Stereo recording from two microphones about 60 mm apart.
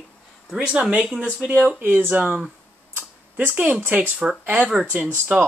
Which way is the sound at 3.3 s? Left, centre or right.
Right.